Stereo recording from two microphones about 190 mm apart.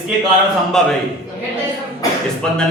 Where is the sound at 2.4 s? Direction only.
5° left (ahead or behind).